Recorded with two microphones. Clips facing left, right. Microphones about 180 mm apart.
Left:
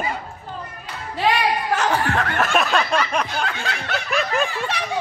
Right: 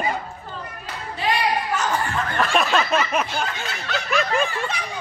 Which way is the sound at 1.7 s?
70° left (ahead or behind).